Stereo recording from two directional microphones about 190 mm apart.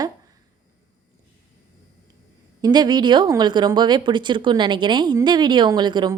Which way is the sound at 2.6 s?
20° right (ahead or behind).